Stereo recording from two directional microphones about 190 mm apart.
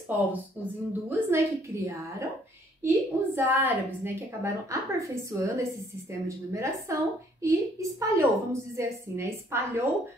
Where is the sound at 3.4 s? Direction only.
10° right (ahead or behind).